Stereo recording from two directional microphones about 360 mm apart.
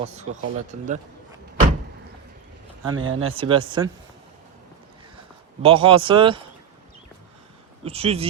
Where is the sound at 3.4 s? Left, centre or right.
Centre.